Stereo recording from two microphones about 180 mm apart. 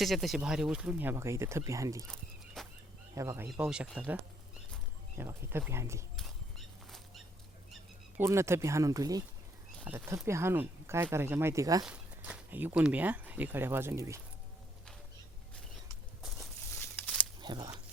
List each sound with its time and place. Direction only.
0.0 s speech: centre (ahead or behind); by 2.0 s 15° right (ahead or behind)
2.6 s a sound: centre (ahead or behind)
3.2 s speech: 15° right (ahead or behind)
6.1 s patter: centre (ahead or behind)
8.2 s speech: 15° right (ahead or behind)
11.9 s speech: 5° right (ahead or behind)
17.4 s speech: 25° right (ahead or behind)